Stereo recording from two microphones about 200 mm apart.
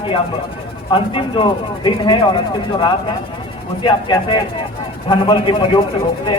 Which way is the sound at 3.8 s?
25° left (ahead or behind).